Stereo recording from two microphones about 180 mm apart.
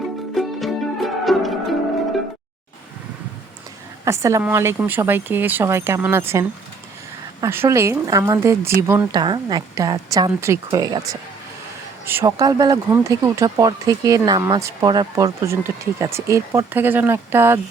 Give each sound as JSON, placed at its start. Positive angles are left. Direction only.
{"t": 0.3, "sound": "music", "side_deg": 0}
{"t": 4.0, "sound": "speech", "side_deg": -15}
{"t": 7.4, "sound": "speech", "side_deg": -15}